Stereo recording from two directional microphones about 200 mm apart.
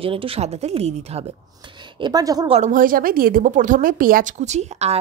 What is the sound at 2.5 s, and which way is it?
A woman's voice, 40° right (ahead or behind).